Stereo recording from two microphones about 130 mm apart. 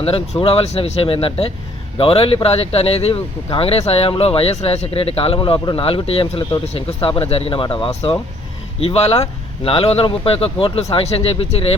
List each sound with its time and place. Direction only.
0.4 s speech: 50° left (ahead or behind)